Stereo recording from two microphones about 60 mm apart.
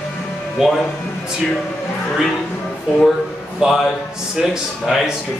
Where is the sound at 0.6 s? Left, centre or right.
Centre.